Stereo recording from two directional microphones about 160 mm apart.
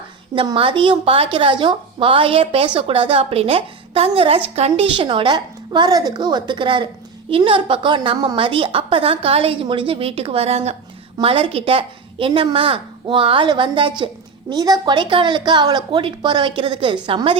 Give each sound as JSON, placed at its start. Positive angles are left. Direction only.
{"t": 0.3, "sound": "a woman's voice", "side_deg": -35}